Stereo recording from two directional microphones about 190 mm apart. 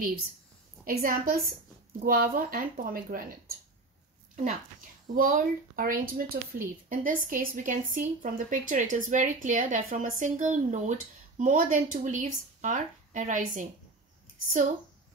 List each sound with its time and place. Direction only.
0.8 s a woman's voice: 50° right (ahead or behind)
5.1 s a woman's voice: 50° right (ahead or behind)